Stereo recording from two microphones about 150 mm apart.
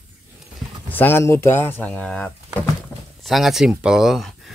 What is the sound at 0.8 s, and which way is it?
Speech, 15° left (ahead or behind).